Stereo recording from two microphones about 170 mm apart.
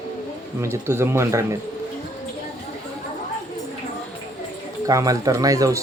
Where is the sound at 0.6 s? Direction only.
15° right (ahead or behind).